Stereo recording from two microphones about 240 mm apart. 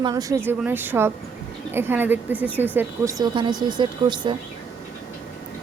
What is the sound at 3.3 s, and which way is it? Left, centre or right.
A woman's voice, centre.